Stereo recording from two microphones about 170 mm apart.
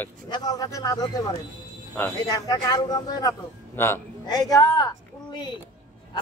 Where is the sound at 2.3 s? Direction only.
25° left (ahead or behind).